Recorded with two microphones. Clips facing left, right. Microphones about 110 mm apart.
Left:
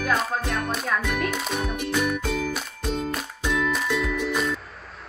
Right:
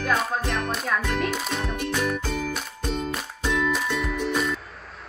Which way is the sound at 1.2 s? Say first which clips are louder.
Even; centre (ahead or behind).